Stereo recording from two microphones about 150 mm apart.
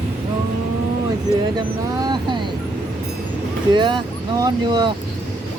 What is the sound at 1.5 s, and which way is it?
Speech, 30° right (ahead or behind).